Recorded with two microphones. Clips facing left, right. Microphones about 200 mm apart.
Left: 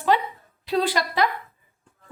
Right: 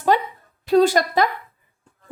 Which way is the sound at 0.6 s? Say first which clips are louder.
Right 8 dB; 45° right (ahead or behind).